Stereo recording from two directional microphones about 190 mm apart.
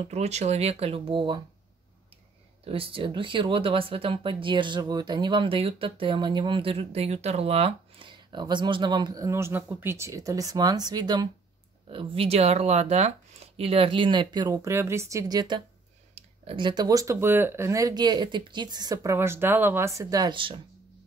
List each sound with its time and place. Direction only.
0.1 s speech: 35° right (ahead or behind)
2.6 s speech: 30° right (ahead or behind)